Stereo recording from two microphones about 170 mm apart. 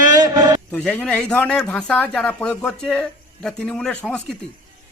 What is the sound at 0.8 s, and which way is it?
Speech, 10° left (ahead or behind).